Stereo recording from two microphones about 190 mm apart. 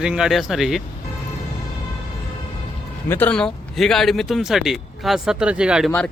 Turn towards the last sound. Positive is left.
turn(degrees=-5)  # may be behind; listen again after turning